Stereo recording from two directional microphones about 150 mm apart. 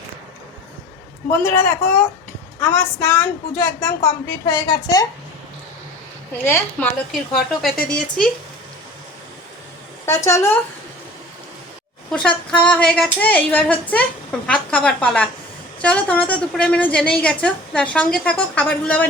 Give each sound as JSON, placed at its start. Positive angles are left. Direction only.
{"t": 1.3, "sound": "a woman's voice", "side_deg": 15}
{"t": 4.4, "sound": "a woman's voice", "side_deg": 30}
{"t": 6.4, "sound": "a woman's voice", "side_deg": 10}
{"t": 10.1, "sound": "a woman's voice", "side_deg": 20}
{"t": 12.1, "sound": "a woman's voice", "side_deg": 5}